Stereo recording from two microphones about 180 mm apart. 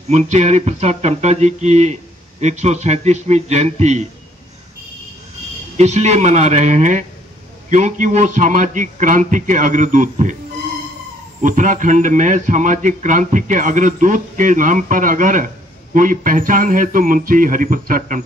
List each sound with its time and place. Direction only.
0.1 s speech: 40° right (ahead or behind)
5.8 s a man's voice: 40° right (ahead or behind)
11.4 s a man's voice: 45° right (ahead or behind)